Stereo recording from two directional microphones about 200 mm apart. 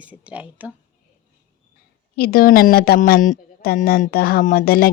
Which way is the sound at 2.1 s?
50° left (ahead or behind).